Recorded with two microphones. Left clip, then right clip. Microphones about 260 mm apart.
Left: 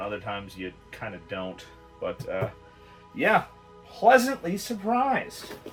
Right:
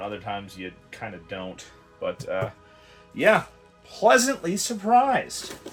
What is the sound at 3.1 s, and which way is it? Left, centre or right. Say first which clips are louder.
Speech: right 3 dB; right.